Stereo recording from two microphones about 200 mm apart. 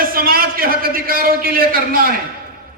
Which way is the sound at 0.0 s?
45° right (ahead or behind).